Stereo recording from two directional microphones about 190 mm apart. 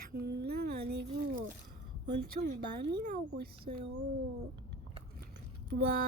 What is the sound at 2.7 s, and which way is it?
Speech, 55° right (ahead or behind).